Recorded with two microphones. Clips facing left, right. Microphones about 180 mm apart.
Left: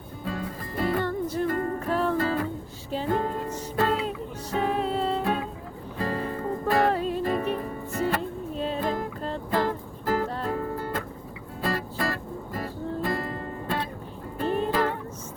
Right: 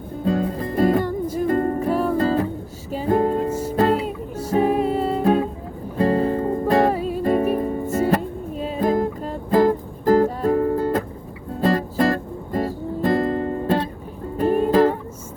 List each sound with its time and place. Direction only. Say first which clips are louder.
0.3 s music: right 11 dB; 35° right (ahead or behind)
0.9 s music: right 5 dB; 10° right (ahead or behind)
1.5 s music: right 7 dB; 30° right (ahead or behind)
1.8 s music: right 5 dB; 10° right (ahead or behind)
2.2 s music: right 7 dB; 30° right (ahead or behind)
3.5 s music: right 10 dB; 10° right (ahead or behind)
3.8 s music: right 6 dB; 40° right (ahead or behind)
4.0 s music: right 5 dB; 10° right (ahead or behind)
5.2 s music: right 9 dB; 40° right (ahead or behind)
6.9 s music: right 3 dB; 10° right (ahead or behind)
7.3 s music: right 8 dB; 40° right (ahead or behind)
8.5 s music: right 1 dB; 10° right (ahead or behind)
8.8 s music: right 8 dB; 45° right (ahead or behind)
11.6 s music: right 10 dB; 40° right (ahead or behind)